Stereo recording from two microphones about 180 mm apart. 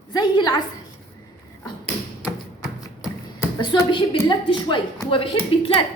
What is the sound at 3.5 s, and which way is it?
A woman's voice, 25° left (ahead or behind).